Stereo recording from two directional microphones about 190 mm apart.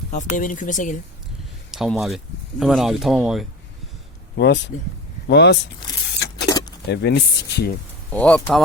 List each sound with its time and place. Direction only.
0.1 s speech: 40° left (ahead or behind)
1.7 s speech: centre (ahead or behind)
4.4 s speech: 65° left (ahead or behind)
6.4 s keys jangling: 20° left (ahead or behind)
6.8 s speech: 60° left (ahead or behind)
8.1 s speech: 5° left (ahead or behind)